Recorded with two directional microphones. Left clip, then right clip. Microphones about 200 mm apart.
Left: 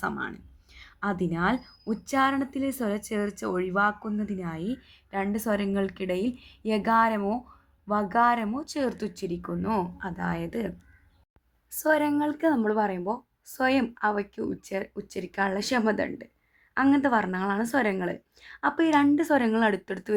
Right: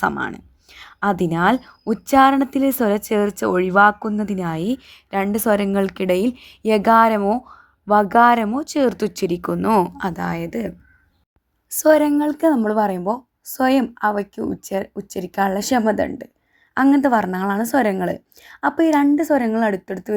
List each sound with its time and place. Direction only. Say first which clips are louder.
0.0 s speech: right 10 dB; 55° right (ahead or behind)
10.2 s a woman's voice: right 6 dB; 30° right (ahead or behind)